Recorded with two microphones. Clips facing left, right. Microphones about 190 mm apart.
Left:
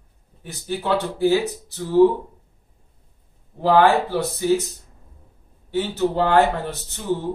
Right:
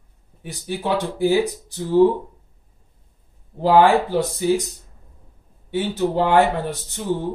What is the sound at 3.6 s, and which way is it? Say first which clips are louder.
Speech: right 1 dB; 15° right (ahead or behind).